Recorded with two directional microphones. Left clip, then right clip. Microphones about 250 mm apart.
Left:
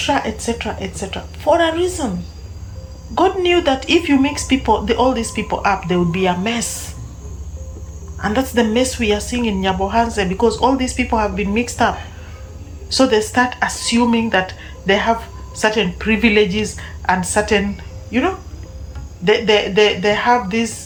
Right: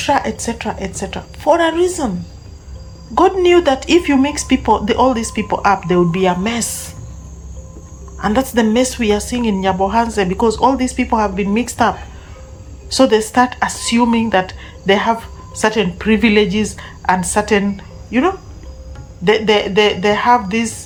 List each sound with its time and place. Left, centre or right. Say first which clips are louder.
0.0 s a woman's voice: right 2 dB; centre
3.2 s speech: right 4 dB; centre
8.2 s a woman's voice: right 2 dB; centre